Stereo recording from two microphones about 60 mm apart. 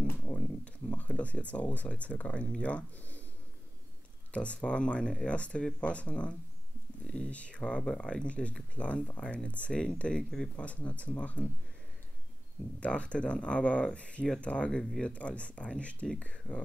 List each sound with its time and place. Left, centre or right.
0.0 s a sound: left
1.5 s speech: left
4.3 s speech: centre
12.8 s speech: centre
14.8 s speech: centre
15.0 s speech: left